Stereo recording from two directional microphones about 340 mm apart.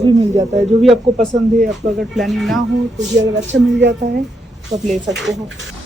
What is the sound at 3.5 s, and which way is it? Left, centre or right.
Speech, right.